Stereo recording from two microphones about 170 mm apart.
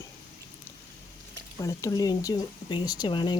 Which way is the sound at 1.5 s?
20° left (ahead or behind).